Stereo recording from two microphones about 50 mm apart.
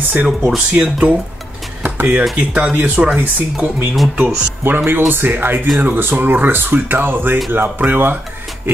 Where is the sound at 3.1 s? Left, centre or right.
Right.